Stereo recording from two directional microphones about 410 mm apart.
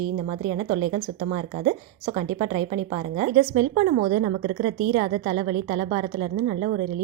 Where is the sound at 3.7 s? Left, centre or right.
Centre.